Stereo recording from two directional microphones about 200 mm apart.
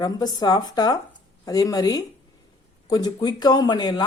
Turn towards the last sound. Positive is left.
turn(degrees=20)  # may be behind; listen again after turning